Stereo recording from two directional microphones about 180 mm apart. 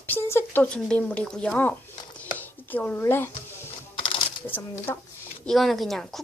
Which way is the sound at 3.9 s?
30° left (ahead or behind).